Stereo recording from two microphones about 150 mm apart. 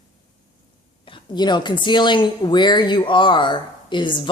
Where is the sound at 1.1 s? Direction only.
30° left (ahead or behind).